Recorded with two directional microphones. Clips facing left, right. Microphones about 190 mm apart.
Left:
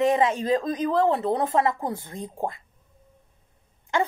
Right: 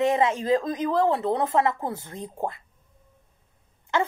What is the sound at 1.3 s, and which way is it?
Speech, 40° left (ahead or behind).